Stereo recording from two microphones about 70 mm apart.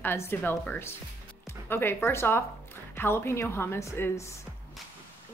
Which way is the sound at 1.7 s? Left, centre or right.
Left.